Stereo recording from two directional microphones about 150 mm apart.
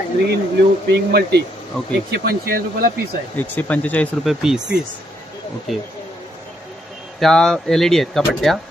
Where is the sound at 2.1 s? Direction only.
90° right.